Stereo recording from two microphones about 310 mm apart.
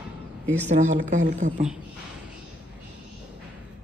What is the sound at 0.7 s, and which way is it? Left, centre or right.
Speech, right.